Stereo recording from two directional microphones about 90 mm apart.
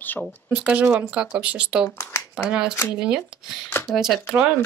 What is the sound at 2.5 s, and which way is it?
Speech, 10° right (ahead or behind).